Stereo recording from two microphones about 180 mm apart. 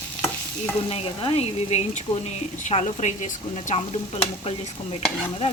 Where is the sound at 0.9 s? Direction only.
30° left (ahead or behind).